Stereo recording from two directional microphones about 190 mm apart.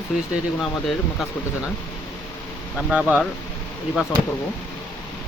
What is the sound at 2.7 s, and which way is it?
Speech, 5° right (ahead or behind).